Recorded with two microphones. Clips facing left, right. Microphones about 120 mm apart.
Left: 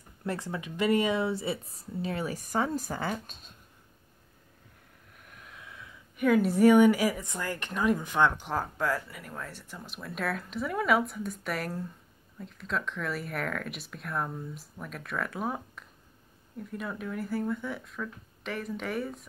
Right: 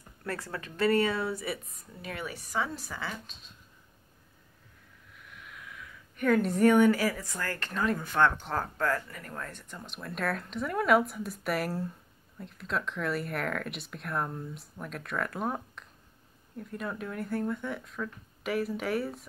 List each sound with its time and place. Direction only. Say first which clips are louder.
0.2 s speech: left 3 dB; 20° left (ahead or behind); by 3.5 s 50° left (ahead or behind)
5.1 s a sound: right 1 dB; 45° left (ahead or behind); by 5.9 s 25° left (ahead or behind)
6.1 s a woman's voice: left 2 dB; 5° left (ahead or behind)